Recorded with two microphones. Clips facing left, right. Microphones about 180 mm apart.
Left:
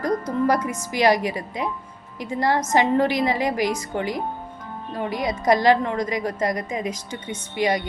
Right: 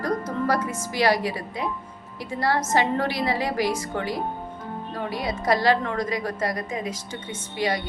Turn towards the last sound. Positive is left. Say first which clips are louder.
# left 3 dB
turn(degrees=20)  # may be behind; listen again after turning